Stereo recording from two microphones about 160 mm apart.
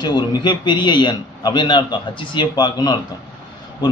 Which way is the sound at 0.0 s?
25° left (ahead or behind).